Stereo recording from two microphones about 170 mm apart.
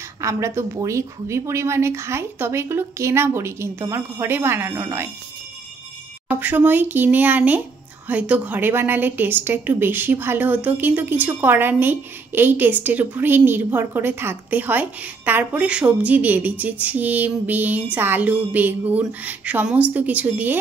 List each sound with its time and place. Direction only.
0.2 s a woman's voice: 15° right (ahead or behind)
6.2 s a woman's voice: 10° right (ahead or behind)